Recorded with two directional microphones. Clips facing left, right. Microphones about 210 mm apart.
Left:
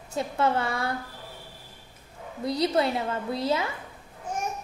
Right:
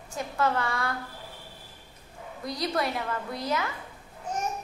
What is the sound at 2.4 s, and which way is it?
A woman's voice, 25° left (ahead or behind).